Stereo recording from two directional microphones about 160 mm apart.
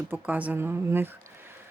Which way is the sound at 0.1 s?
10° right (ahead or behind).